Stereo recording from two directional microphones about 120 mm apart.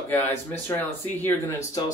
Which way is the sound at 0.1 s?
15° left (ahead or behind).